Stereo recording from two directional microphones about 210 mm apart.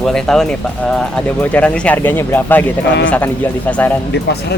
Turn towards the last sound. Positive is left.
turn(degrees=50)  # may be behind; listen again after turning